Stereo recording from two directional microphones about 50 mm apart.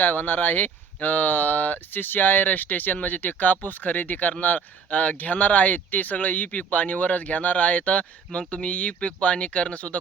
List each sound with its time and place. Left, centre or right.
0.0 s speech: left